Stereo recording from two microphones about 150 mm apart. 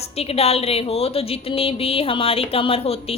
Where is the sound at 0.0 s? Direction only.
40° left (ahead or behind).